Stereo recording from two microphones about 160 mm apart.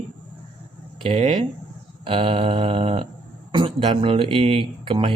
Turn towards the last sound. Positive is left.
turn(degrees=-35)  # may be behind; listen again after turning